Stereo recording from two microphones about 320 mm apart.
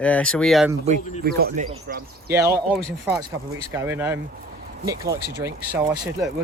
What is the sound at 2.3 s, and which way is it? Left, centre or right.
Speech, centre.